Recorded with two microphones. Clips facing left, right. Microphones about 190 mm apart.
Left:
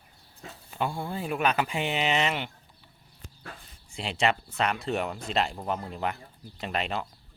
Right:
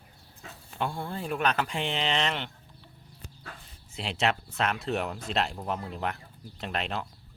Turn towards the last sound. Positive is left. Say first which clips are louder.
# left 2 dB
turn(degrees=0)  # may be behind; listen again after turning